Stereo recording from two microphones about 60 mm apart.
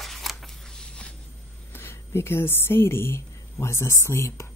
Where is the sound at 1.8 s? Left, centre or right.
Left.